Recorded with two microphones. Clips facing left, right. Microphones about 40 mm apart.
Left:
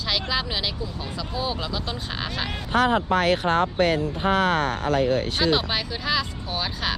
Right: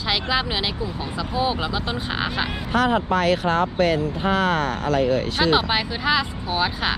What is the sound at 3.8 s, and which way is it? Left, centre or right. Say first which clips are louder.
Speech: right 1 dB; right.